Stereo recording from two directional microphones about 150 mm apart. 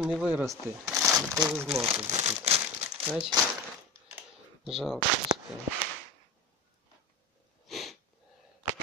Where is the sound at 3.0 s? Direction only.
10° right (ahead or behind).